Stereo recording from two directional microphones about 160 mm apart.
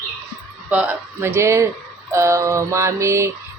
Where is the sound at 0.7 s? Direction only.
10° right (ahead or behind).